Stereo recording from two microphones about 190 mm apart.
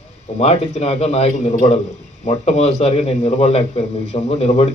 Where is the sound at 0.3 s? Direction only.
30° left (ahead or behind).